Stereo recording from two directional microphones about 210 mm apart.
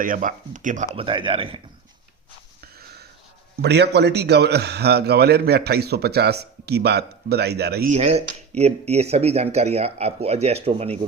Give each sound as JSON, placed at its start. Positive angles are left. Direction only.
{"t": 0.0, "sound": "speech", "side_deg": -40}
{"t": 0.9, "sound": "speech", "side_deg": -25}
{"t": 2.6, "sound": "a sound", "side_deg": -50}
{"t": 3.6, "sound": "a man's voice", "side_deg": -55}
{"t": 7.9, "sound": "speech", "side_deg": -30}